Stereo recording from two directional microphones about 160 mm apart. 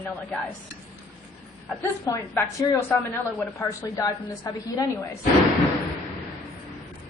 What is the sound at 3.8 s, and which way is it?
A woman's voice, 20° left (ahead or behind).